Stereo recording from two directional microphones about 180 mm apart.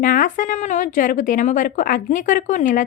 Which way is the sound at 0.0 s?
50° left (ahead or behind).